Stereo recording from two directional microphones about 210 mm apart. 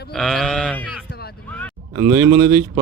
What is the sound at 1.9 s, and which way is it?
Speech, 15° right (ahead or behind).